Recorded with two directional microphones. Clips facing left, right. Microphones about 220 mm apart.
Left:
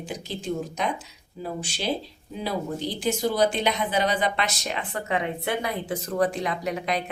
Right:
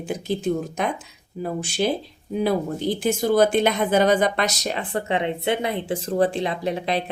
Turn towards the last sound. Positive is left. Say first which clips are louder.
# right 3 dB
turn(degrees=-30)  # may be behind; listen again after turning